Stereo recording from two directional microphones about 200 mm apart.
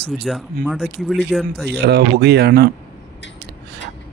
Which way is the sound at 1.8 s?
55° right (ahead or behind).